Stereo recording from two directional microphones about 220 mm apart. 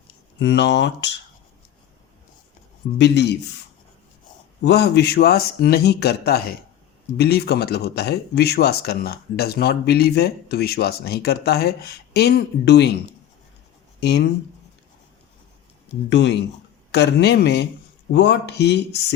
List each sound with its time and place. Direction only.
0.3 s speech: 50° left (ahead or behind)
3.0 s speech: 50° left (ahead or behind)
4.6 s speech: 50° left (ahead or behind)
14.0 s speech: 50° left (ahead or behind)
16.0 s speech: 55° left (ahead or behind)